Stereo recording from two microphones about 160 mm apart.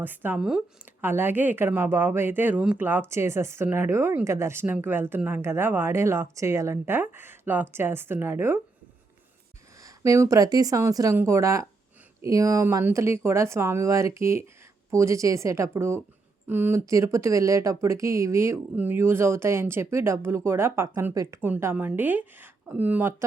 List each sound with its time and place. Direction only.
0.0 s speech: 10° right (ahead or behind)
9.8 s speech: 20° right (ahead or behind)